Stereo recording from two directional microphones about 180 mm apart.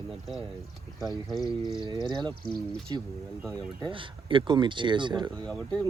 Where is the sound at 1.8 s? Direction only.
25° right (ahead or behind).